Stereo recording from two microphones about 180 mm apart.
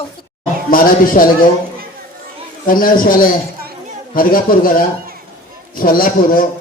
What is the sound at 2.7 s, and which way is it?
A man's voice, 50° left (ahead or behind).